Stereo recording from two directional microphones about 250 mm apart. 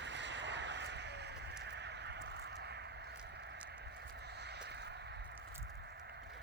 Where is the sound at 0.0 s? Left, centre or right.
Right.